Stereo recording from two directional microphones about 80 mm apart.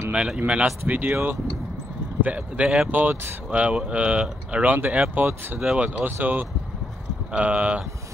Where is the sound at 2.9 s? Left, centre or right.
Right.